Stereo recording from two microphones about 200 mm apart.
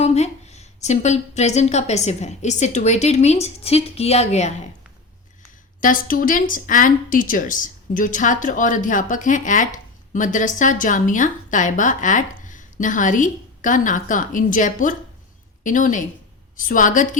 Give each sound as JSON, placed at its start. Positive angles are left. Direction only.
{"t": 0.0, "sound": "a woman's voice", "side_deg": 35}
{"t": 5.8, "sound": "a woman's voice", "side_deg": 45}